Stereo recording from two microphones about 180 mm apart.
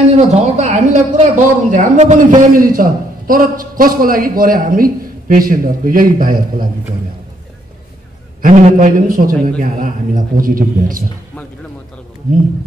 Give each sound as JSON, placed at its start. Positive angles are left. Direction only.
{"t": 0.3, "sound": "speech", "side_deg": -40}
{"t": 8.4, "sound": "speech", "side_deg": -45}